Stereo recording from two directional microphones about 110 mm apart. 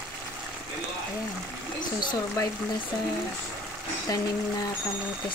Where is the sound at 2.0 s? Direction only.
40° left (ahead or behind).